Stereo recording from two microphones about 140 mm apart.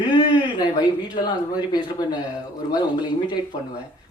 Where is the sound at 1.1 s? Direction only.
30° left (ahead or behind).